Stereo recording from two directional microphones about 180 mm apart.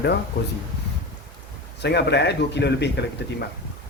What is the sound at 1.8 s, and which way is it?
Speech, 70° left (ahead or behind).